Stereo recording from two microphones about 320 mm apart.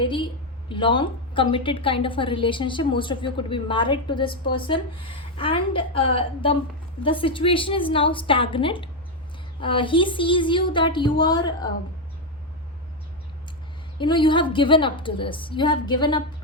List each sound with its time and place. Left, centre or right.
0.0 s a sound: centre
0.7 s a woman's voice: centre
14.0 s a woman's voice: centre